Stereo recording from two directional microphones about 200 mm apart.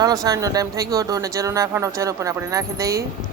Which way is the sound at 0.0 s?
20° right (ahead or behind).